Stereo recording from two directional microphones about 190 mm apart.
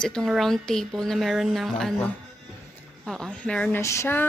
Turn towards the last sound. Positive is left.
turn(degrees=15)  # may be behind; listen again after turning